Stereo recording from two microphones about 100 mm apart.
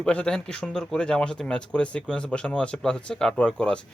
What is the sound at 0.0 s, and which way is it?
Speech, 10° left (ahead or behind).